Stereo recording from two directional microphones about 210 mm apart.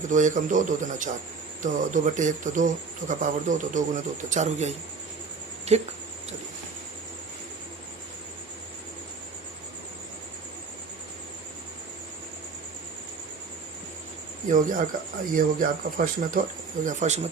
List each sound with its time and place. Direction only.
0.1 s speech: 35° right (ahead or behind)
14.4 s speech: 40° right (ahead or behind)